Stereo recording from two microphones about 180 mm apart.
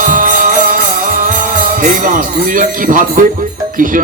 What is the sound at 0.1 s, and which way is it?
Music, 50° right (ahead or behind).